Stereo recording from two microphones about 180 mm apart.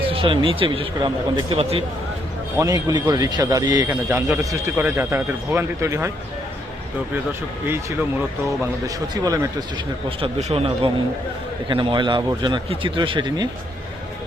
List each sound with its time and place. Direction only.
0.1 s a man's voice: 30° right (ahead or behind)
2.6 s a man's voice: 20° right (ahead or behind)
9.1 s a man's voice: 20° right (ahead or behind)
10.2 s a man's voice: 30° right (ahead or behind)